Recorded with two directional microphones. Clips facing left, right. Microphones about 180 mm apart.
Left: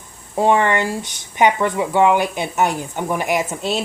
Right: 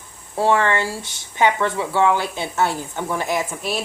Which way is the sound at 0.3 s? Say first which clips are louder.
Left 2 dB; 15° left (ahead or behind).